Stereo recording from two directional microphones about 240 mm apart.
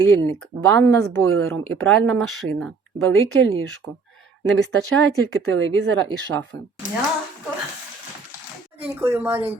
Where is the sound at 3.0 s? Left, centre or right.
Right.